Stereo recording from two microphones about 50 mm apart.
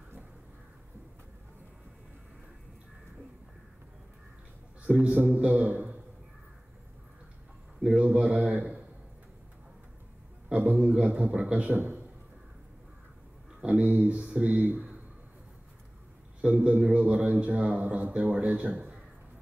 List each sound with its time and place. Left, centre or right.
4.8 s a man's voice: centre
5.4 s a man's voice: right
7.8 s a man's voice: right
10.5 s a man's voice: right
11.7 s a man's voice: right
13.7 s a man's voice: right
16.3 s a man's voice: right
18.5 s speech: right